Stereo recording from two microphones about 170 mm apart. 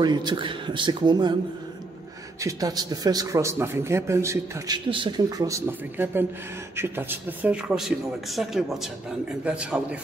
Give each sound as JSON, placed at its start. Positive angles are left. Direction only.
{"t": 0.0, "sound": "a man's voice", "side_deg": -25}
{"t": 2.4, "sound": "a man's voice", "side_deg": -20}